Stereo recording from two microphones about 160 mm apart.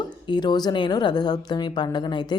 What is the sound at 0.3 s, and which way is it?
A woman's voice, 25° left (ahead or behind).